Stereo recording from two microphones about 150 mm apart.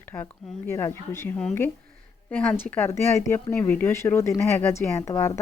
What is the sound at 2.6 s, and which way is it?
Speech, 10° left (ahead or behind).